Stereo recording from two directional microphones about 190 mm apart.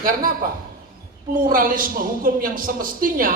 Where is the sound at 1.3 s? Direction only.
45° right (ahead or behind).